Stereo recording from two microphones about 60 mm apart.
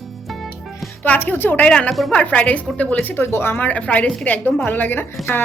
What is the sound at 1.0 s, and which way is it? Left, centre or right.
Speech, left.